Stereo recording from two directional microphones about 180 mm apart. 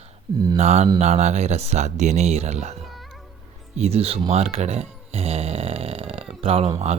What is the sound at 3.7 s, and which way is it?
Speech, 35° right (ahead or behind).